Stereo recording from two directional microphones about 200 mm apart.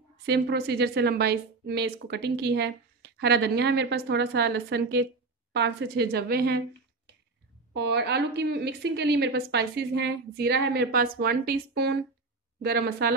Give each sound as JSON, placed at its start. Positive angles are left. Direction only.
{"t": 0.2, "sound": "a woman's voice", "side_deg": -55}
{"t": 7.7, "sound": "a woman's voice", "side_deg": -60}